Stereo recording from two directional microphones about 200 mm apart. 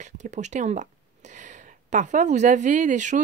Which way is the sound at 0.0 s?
35° right (ahead or behind).